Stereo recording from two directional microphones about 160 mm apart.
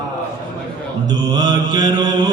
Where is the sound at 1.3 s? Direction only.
25° right (ahead or behind).